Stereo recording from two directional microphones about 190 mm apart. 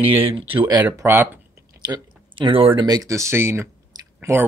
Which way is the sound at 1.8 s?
25° right (ahead or behind).